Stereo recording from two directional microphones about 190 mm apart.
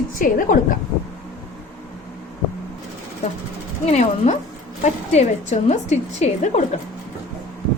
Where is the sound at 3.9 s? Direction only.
35° left (ahead or behind).